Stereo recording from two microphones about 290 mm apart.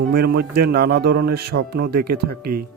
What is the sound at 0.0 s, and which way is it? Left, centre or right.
Speech, right.